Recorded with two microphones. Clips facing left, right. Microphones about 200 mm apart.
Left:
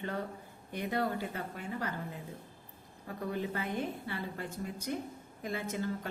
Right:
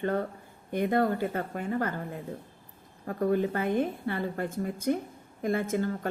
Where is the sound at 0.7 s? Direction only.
50° right (ahead or behind).